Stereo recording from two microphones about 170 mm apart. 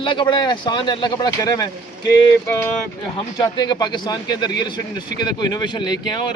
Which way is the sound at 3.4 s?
25° left (ahead or behind).